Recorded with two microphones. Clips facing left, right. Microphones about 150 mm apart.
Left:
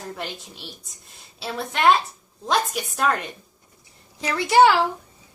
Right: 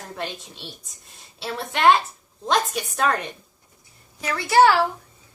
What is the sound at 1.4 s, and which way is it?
A woman's voice, centre (ahead or behind).